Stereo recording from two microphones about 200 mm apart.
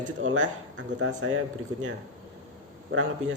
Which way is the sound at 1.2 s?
85° right.